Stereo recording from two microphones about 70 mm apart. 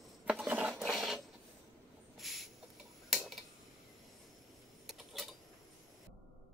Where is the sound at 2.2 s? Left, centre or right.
Centre.